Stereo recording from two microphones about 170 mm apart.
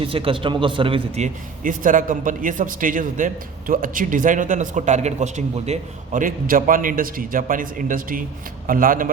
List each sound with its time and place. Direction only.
0.0 s a man's voice: 30° right (ahead or behind); by 9.0 s 55° right (ahead or behind)